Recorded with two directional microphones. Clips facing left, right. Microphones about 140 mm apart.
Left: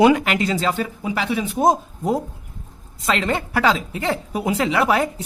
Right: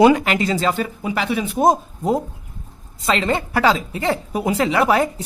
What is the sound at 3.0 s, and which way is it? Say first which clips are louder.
A woman's voice: right 2 dB; 30° right (ahead or behind).